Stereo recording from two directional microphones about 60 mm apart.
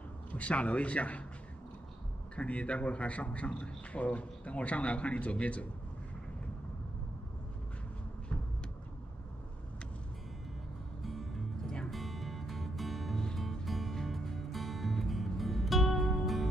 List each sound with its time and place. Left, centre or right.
0.3 s a man's voice: left
2.3 s a man's voice: left
11.0 s music: centre